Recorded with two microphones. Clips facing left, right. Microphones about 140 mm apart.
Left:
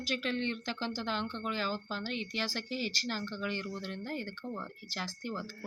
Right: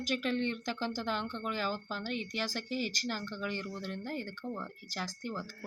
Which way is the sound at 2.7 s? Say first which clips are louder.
Right 1 dB; 45° right (ahead or behind).